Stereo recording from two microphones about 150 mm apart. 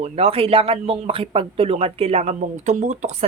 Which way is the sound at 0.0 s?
40° right (ahead or behind).